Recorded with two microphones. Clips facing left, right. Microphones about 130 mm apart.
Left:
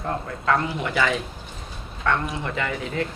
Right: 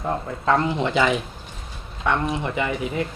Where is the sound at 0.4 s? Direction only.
25° right (ahead or behind).